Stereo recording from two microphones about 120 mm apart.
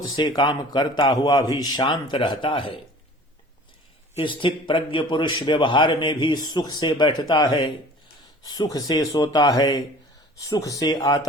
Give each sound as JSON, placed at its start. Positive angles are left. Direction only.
{"t": 0.2, "sound": "speech", "side_deg": 35}
{"t": 4.2, "sound": "speech", "side_deg": 45}